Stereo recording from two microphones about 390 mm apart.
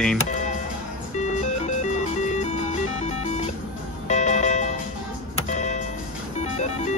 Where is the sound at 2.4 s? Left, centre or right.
Centre.